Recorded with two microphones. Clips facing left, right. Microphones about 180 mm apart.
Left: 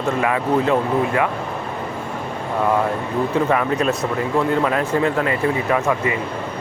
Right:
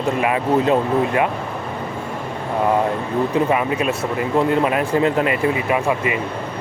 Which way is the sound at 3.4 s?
10° right (ahead or behind).